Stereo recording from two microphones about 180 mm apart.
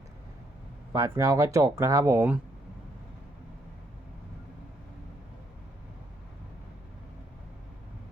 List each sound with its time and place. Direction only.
0.9 s speech: 15° right (ahead or behind)